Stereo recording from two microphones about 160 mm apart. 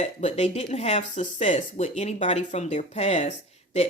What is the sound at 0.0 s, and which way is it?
Speech, 45° left (ahead or behind).